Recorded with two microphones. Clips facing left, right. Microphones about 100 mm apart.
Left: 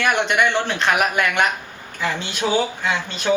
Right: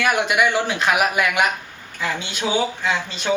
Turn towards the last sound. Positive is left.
turn(degrees=0)  # may be behind; listen again after turning